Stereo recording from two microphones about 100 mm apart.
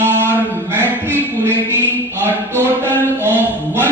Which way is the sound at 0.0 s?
20° right (ahead or behind).